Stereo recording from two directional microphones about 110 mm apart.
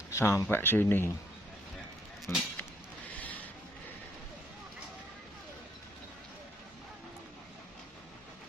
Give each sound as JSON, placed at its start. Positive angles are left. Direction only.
{"t": 0.1, "sound": "speech", "side_deg": 25}
{"t": 2.3, "sound": "speech", "side_deg": 20}